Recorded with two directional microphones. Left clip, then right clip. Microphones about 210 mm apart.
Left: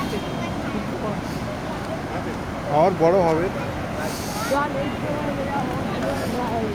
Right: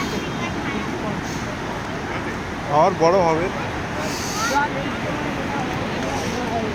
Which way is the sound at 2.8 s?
15° left (ahead or behind).